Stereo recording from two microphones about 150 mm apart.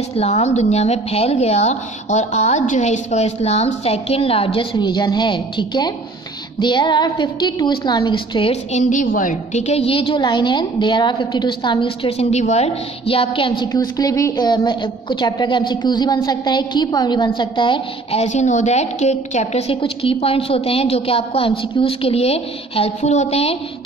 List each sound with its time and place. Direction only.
0.1 s a woman's voice: 45° left (ahead or behind); by 8.5 s 30° left (ahead or behind)
8.5 s a woman's voice: 55° left (ahead or behind); by 13.7 s 35° left (ahead or behind)
13.7 s a woman's voice: 25° left (ahead or behind)
18.2 s a woman's voice: 50° left (ahead or behind)